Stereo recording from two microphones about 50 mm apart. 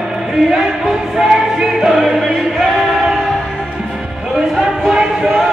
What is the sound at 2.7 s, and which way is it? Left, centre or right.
Choir, centre.